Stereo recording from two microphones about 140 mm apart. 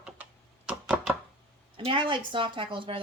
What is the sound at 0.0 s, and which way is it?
Computer keyboard, 10° right (ahead or behind).